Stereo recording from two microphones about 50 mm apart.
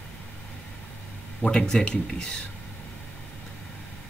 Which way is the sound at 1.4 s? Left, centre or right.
Centre.